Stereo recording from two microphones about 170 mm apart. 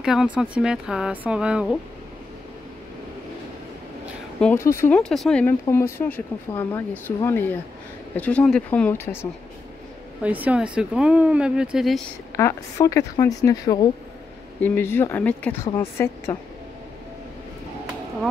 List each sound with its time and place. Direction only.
0.0 s speech: 5° right (ahead or behind)
4.4 s speech: 15° left (ahead or behind)
10.2 s speech: 10° right (ahead or behind)
12.4 s a woman's voice: 20° left (ahead or behind)